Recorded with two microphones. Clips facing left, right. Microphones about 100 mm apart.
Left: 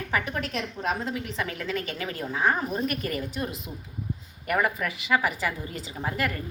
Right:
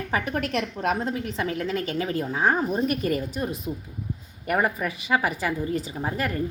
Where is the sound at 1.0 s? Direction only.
40° right (ahead or behind).